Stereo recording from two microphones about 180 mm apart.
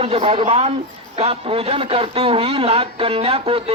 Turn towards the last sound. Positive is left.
turn(degrees=-30)  # may be behind; listen again after turning